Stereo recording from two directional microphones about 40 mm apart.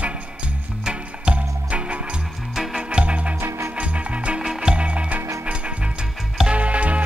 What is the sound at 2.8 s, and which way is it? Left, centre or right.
Music, right.